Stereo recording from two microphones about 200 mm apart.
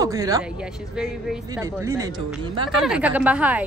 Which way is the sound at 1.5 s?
15° right (ahead or behind).